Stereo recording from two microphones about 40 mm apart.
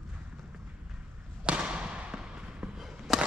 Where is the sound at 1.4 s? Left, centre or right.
Right.